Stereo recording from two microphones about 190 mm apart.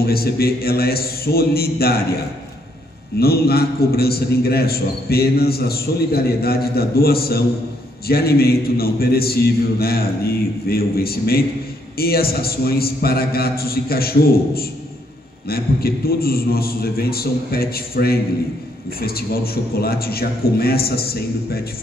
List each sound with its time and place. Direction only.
0.0 s a man's voice: 55° left (ahead or behind)
3.2 s a man's voice: 55° left (ahead or behind)